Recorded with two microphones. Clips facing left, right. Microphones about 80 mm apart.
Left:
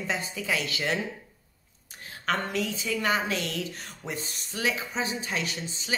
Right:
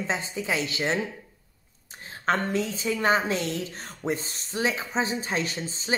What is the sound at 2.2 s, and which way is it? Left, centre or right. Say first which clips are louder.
A woman's voice: right 3 dB; right.